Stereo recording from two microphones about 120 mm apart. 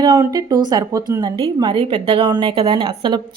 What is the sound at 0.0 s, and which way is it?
Speech, 30° right (ahead or behind).